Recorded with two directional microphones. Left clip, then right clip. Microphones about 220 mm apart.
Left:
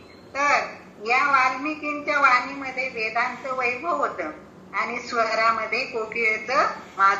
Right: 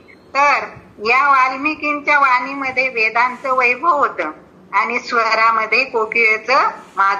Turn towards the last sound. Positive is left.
turn(degrees=-40)  # may be behind; listen again after turning